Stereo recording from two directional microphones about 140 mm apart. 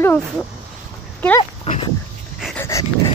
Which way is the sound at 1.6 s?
40° left (ahead or behind).